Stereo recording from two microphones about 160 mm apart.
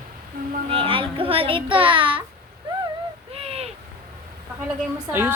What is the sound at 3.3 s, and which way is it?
Owl, 40° right (ahead or behind).